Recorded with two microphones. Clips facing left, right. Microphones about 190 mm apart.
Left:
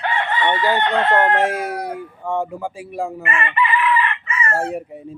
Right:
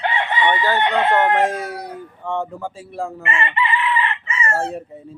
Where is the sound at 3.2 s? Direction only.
25° right (ahead or behind).